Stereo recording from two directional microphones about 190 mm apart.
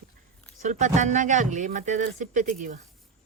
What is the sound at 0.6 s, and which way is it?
Speech, 40° right (ahead or behind).